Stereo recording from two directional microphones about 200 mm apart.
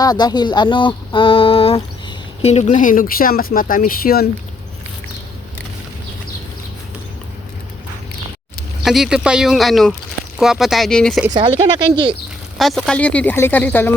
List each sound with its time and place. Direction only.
0.0 s speech: 20° left (ahead or behind); by 4.3 s 50° left (ahead or behind)
8.8 s speech: centre (ahead or behind)
11.3 s speech: 25° right (ahead or behind)
12.5 s speech: centre (ahead or behind)